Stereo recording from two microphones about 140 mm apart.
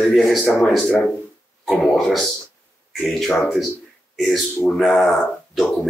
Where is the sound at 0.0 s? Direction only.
Centre (ahead or behind).